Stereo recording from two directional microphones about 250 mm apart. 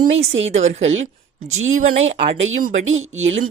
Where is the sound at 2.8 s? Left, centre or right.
Right.